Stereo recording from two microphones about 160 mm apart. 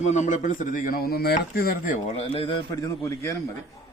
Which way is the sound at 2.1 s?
35° left (ahead or behind).